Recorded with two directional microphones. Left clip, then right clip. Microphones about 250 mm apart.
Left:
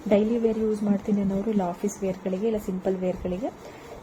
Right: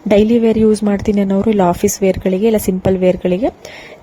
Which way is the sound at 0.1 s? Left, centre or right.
Right.